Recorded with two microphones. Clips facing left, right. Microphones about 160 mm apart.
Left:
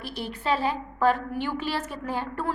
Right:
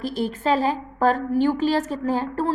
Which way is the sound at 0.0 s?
45° right (ahead or behind).